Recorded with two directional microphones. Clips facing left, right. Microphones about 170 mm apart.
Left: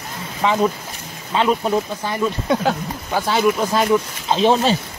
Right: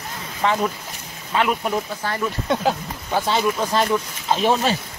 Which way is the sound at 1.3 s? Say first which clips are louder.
Left 3 dB; 30° left (ahead or behind).